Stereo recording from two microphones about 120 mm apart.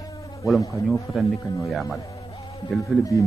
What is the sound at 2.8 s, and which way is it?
Speech, 25° left (ahead or behind).